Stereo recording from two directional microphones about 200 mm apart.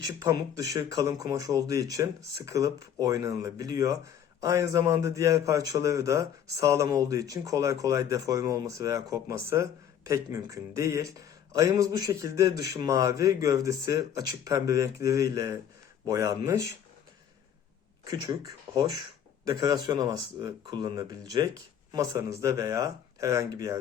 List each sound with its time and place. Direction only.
0.2 s a man's voice: 15° right (ahead or behind)
18.1 s speech: 20° right (ahead or behind)